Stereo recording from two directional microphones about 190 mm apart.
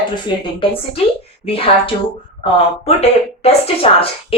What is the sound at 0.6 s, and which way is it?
A woman's voice, 30° left (ahead or behind).